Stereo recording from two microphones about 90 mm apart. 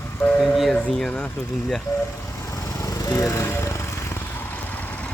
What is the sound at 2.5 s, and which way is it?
Lawn mower, 35° left (ahead or behind).